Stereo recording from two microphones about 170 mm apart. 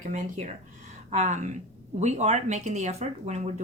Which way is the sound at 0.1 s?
45° right (ahead or behind).